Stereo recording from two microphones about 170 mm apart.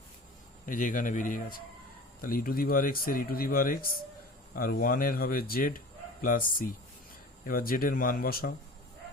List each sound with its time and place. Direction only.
0.6 s speech: 50° left (ahead or behind)